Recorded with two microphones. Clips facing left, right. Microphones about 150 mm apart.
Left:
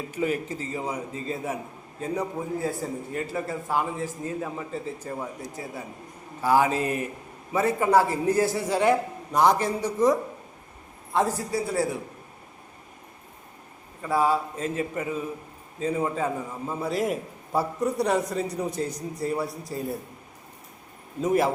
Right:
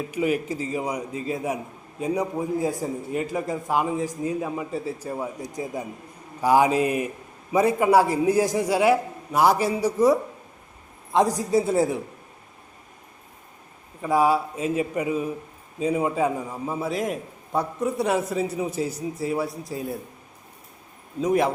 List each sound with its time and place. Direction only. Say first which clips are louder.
0.1 s a man's voice: right 2 dB; 15° right (ahead or behind)
14.0 s a man's voice: right 3 dB; 15° right (ahead or behind)
16.9 s a man's voice: left 1 dB; centre (ahead or behind)
21.2 s a man's voice: right 1 dB; centre (ahead or behind)